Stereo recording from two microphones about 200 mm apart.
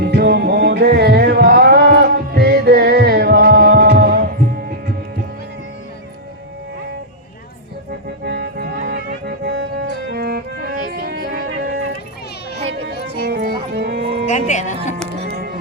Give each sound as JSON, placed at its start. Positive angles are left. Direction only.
{"t": 0.0, "sound": "music", "side_deg": -55}
{"t": 8.2, "sound": "music", "side_deg": -55}
{"t": 13.2, "sound": "music", "side_deg": -55}
{"t": 13.7, "sound": "sheep", "side_deg": -55}
{"t": 14.3, "sound": "music", "side_deg": 35}
{"t": 15.2, "sound": "music", "side_deg": -50}